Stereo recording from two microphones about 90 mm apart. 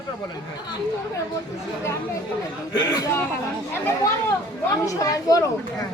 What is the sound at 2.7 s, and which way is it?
Speech, 45° left (ahead or behind).